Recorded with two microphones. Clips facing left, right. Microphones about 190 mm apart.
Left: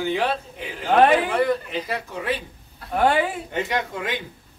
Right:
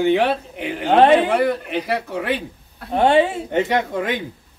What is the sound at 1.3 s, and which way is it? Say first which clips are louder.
Speech: right 3 dB; 65° right (ahead or behind).